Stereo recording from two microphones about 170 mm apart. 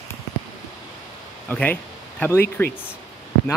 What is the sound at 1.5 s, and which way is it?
Speech, 10° left (ahead or behind).